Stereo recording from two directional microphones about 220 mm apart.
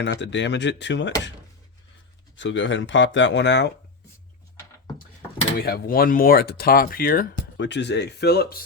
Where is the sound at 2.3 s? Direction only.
55° left (ahead or behind).